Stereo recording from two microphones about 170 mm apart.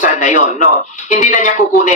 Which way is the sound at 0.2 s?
45° left (ahead or behind).